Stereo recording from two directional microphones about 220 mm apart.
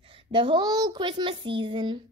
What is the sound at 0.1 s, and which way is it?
A woman's voice, 20° right (ahead or behind).